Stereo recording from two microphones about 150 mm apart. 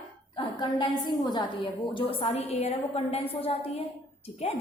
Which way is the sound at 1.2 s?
25° left (ahead or behind).